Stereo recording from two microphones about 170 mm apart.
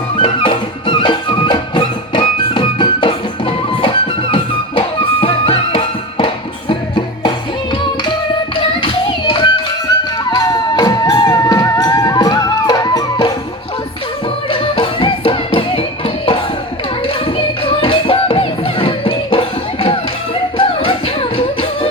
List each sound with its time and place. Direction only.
0.2 s music: 30° left (ahead or behind)
8.8 s a sound: 30° left (ahead or behind)
10.0 s music: 25° left (ahead or behind)
14.5 s music: 30° left (ahead or behind)